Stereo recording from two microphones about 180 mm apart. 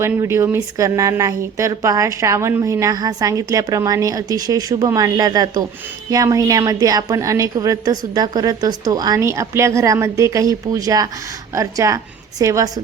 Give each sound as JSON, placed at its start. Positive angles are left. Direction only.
{"t": 0.0, "sound": "a woman's voice", "side_deg": -15}